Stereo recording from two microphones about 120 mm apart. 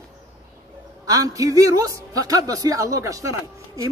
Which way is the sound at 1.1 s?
30° right (ahead or behind).